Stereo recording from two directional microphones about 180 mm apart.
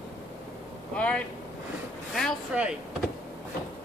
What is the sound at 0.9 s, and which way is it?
Speech, 5° left (ahead or behind).